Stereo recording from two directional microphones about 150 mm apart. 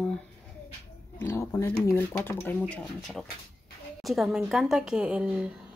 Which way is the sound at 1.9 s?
15° left (ahead or behind).